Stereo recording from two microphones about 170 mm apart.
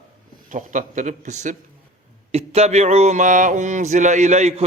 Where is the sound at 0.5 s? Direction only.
50° right (ahead or behind).